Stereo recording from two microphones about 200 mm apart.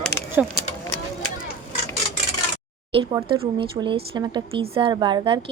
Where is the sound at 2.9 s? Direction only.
25° right (ahead or behind).